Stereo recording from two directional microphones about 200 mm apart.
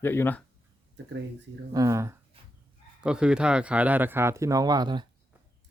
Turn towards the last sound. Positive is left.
turn(degrees=-20)  # may be behind; listen again after turning